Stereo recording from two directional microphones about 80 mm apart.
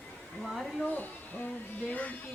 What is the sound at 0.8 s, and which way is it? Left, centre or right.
Speech, left.